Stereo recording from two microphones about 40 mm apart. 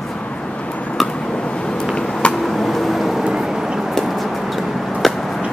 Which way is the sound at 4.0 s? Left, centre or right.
Centre.